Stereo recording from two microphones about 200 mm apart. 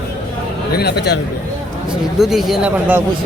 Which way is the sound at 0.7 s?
55° left (ahead or behind).